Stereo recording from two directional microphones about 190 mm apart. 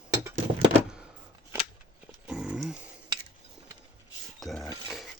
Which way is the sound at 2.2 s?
5° right (ahead or behind).